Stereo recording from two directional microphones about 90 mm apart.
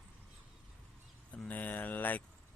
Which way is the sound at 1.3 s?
15° left (ahead or behind).